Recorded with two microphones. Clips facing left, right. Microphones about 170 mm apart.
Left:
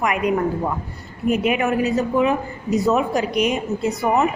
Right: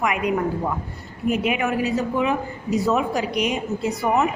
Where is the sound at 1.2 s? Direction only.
45° left (ahead or behind).